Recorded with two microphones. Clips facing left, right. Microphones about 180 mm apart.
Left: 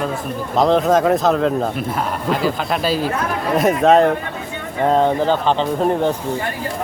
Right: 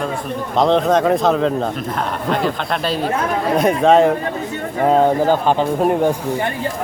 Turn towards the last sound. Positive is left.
turn(degrees=-10)  # may be behind; listen again after turning